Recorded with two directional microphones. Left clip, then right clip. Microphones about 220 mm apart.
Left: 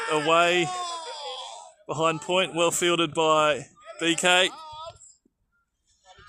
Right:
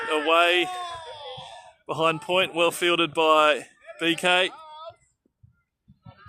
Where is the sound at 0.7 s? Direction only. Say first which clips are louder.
Left 2 dB; 45° left (ahead or behind).